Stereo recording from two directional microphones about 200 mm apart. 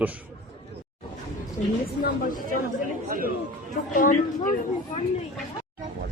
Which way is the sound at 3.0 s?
45° right (ahead or behind).